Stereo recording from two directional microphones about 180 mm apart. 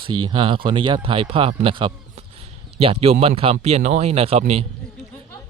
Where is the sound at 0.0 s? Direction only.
25° right (ahead or behind).